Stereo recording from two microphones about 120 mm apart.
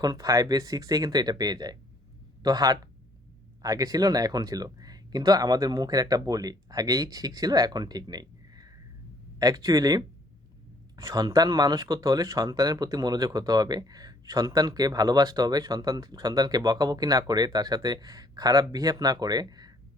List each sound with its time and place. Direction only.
0.0 s speech: 30° right (ahead or behind)